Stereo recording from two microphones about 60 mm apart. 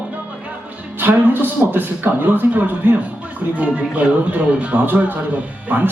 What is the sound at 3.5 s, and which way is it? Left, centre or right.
Speech, centre.